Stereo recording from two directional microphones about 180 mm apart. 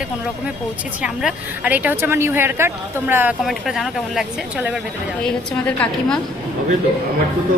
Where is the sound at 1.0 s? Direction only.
5° right (ahead or behind).